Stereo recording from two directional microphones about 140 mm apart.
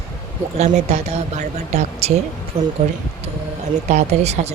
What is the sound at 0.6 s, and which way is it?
Speech, 55° right (ahead or behind).